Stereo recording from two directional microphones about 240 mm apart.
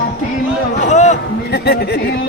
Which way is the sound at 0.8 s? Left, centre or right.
Left.